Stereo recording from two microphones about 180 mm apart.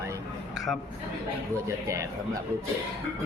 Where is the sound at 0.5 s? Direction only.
Centre (ahead or behind).